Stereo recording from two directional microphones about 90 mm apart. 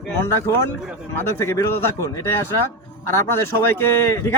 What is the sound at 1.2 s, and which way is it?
Speech, 30° left (ahead or behind).